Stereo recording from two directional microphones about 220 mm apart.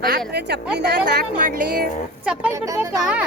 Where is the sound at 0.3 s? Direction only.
50° right (ahead or behind).